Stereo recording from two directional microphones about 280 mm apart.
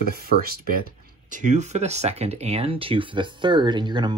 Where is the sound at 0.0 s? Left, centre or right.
Right.